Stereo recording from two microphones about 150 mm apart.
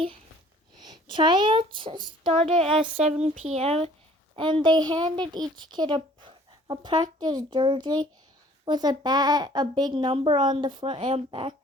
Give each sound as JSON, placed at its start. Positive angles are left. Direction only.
{"t": 0.8, "sound": "a child's voice", "side_deg": -30}
{"t": 4.4, "sound": "a child's voice", "side_deg": -35}